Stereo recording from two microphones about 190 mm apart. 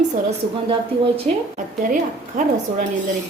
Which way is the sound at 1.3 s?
40° right (ahead or behind).